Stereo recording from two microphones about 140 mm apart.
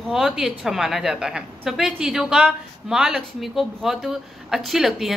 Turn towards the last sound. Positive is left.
turn(degrees=0)  # may be behind; listen again after turning